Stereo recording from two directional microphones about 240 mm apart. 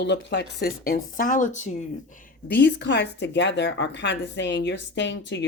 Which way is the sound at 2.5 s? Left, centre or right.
Left.